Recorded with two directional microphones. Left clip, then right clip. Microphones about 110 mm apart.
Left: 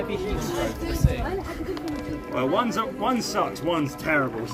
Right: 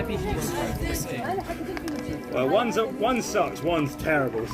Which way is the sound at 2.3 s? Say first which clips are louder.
Right 1 dB; 50° left (ahead or behind).